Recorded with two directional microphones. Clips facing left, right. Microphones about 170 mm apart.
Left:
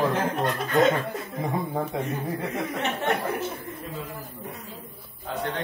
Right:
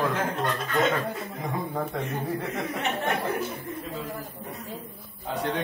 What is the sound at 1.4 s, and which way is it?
Speech, 25° left (ahead or behind).